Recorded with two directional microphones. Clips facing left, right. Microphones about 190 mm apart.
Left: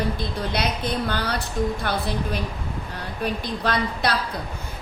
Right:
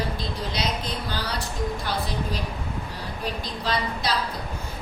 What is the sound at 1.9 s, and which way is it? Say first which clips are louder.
Speech: left 2 dB; 60° left (ahead or behind).